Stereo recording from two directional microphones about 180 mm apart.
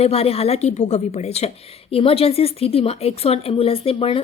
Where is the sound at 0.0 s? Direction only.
35° left (ahead or behind).